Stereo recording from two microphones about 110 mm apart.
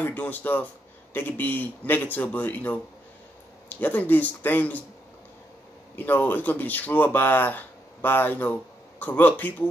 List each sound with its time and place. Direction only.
0.0 s speech: 15° left (ahead or behind)
5.9 s speech: 15° left (ahead or behind)